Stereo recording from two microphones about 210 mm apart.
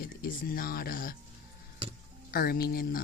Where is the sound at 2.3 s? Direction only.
45° left (ahead or behind).